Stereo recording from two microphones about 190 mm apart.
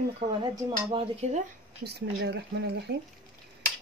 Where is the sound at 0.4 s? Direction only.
25° right (ahead or behind).